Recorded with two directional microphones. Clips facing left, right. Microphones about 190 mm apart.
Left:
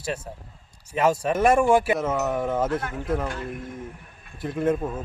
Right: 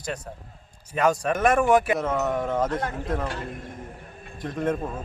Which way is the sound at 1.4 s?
25° left (ahead or behind).